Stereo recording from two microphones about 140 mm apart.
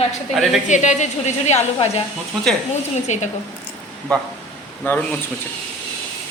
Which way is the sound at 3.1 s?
55° left (ahead or behind).